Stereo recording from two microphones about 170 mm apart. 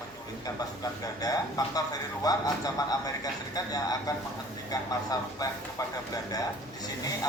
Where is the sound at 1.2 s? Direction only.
20° left (ahead or behind).